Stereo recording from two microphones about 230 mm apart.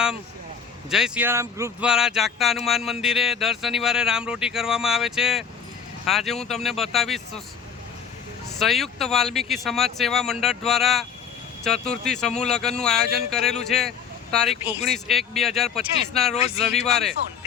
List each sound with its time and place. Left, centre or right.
0.9 s speech: centre
8.5 s speech: centre
16.3 s speech: left
16.8 s speech: centre